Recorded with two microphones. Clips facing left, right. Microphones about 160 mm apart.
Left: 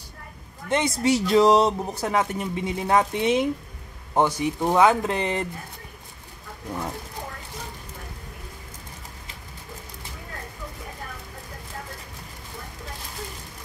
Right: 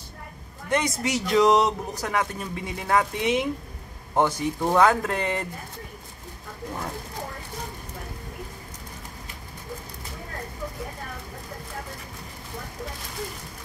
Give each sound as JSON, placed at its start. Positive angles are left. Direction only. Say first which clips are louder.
{"t": 0.7, "sound": "speech", "louder": "left 4 dB", "side_deg": 25}
{"t": 4.1, "sound": "speech", "louder": "left 1 dB", "side_deg": 15}